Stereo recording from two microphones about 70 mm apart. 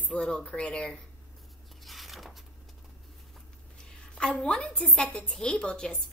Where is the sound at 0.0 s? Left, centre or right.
Centre.